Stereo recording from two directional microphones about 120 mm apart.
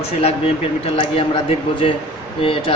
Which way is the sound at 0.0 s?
60° left (ahead or behind).